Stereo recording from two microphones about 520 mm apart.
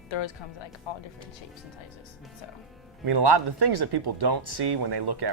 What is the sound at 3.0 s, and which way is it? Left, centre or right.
Speech, right.